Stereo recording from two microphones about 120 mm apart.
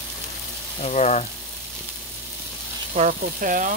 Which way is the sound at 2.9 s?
85° right.